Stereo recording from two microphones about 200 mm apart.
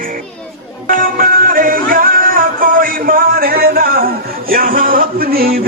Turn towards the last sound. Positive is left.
turn(degrees=-50)  # may be behind; listen again after turning